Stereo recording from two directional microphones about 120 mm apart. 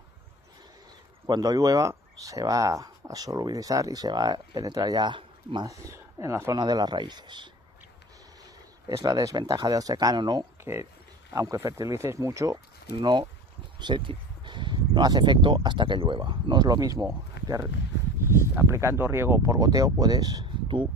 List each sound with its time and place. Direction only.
1.2 s speech: 35° right (ahead or behind)
5.7 s speech: 25° right (ahead or behind)
6.6 s speech: 35° right (ahead or behind)
8.8 s speech: 30° right (ahead or behind)
10.6 s speech: 20° right (ahead or behind); by 20.9 s 45° right (ahead or behind)